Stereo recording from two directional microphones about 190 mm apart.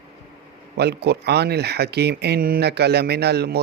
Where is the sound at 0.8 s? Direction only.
60° right (ahead or behind).